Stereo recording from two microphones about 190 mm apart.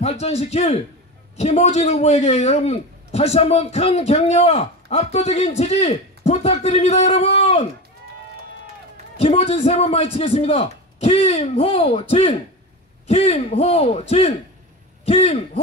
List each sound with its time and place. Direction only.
0.0 s a man's voice: 35° left (ahead or behind)
9.2 s a man's voice: 30° left (ahead or behind)